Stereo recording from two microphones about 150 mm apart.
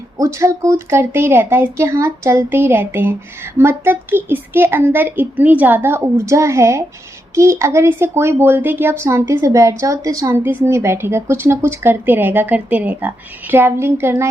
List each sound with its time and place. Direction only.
0.2 s speech: 20° right (ahead or behind)